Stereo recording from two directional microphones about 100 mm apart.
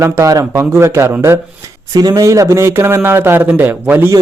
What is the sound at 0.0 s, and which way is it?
Speech, 30° right (ahead or behind).